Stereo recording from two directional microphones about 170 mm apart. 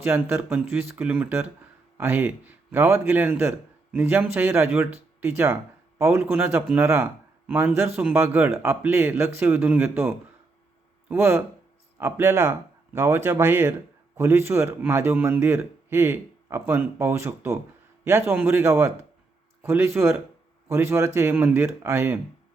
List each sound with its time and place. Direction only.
0.0 s speech: 15° right (ahead or behind)
6.0 s speech: 15° right (ahead or behind)